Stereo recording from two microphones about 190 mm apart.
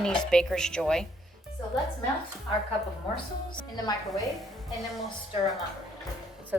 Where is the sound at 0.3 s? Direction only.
5° left (ahead or behind).